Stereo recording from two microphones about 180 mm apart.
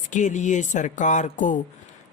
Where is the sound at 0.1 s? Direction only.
45° left (ahead or behind).